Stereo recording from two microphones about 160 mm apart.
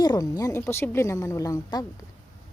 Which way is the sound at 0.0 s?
25° left (ahead or behind).